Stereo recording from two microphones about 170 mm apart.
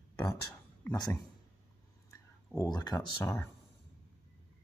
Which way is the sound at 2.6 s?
25° left (ahead or behind).